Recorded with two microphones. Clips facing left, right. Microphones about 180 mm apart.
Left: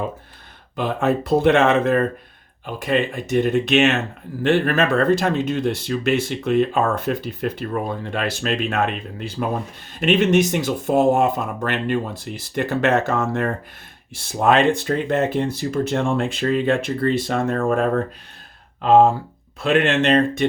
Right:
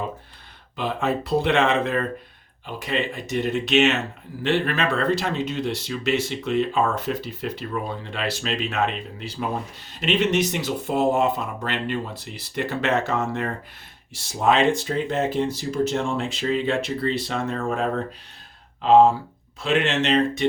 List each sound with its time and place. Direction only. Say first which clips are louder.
0.8 s speech: left 4 dB; 50° left (ahead or behind)